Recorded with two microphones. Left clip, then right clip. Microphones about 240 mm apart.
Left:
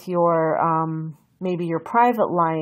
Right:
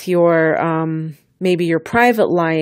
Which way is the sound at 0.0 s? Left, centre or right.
Right.